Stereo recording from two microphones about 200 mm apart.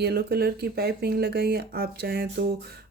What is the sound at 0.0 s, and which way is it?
Speech, 50° right (ahead or behind).